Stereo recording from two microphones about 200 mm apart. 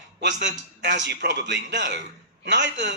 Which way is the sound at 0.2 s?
60° right (ahead or behind).